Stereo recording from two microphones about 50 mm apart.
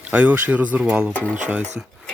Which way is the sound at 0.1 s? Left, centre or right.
Right.